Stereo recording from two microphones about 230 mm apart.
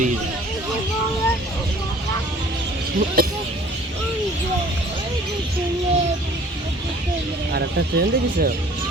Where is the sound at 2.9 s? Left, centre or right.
Right.